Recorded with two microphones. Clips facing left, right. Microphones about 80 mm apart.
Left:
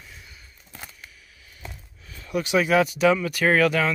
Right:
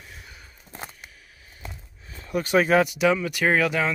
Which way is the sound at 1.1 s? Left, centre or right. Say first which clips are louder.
Right 1 dB; right.